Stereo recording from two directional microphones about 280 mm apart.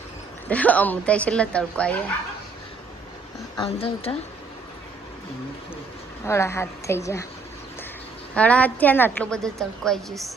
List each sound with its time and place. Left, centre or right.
0.4 s a woman's voice: centre
3.6 s speech: centre
6.2 s a woman's voice: centre
8.4 s a woman's voice: centre